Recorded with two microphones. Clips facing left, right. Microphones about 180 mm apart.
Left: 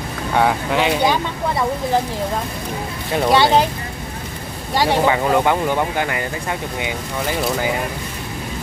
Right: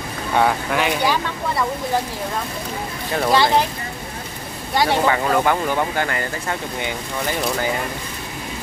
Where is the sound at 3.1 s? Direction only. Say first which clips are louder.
Left 2 dB; 15° left (ahead or behind).